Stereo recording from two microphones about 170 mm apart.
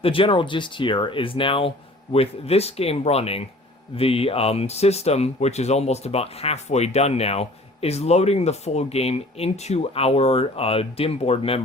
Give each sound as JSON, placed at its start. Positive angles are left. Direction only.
{"t": 0.0, "sound": "speech", "side_deg": 30}